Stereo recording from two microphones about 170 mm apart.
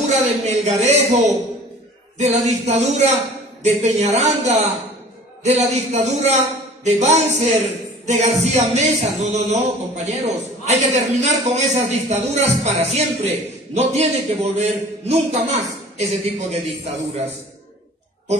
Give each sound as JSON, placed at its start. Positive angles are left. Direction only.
{"t": 0.0, "sound": "speech", "side_deg": -40}